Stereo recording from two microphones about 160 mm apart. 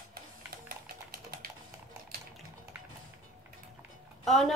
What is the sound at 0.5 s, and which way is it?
Typing, 65° right (ahead or behind).